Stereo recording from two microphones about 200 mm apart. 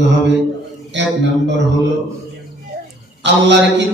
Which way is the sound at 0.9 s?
60° right (ahead or behind).